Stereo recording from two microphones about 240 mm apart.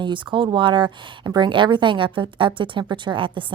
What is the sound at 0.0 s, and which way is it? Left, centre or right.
Speech, centre.